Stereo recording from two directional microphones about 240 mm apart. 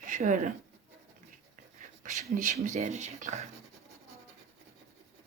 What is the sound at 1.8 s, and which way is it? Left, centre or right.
Speech, right.